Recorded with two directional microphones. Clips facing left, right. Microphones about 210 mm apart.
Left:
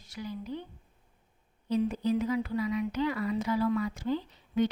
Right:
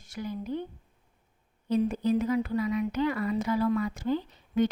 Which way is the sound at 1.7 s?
50° right (ahead or behind).